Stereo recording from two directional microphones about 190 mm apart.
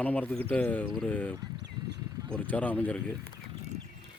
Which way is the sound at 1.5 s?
65° right (ahead or behind).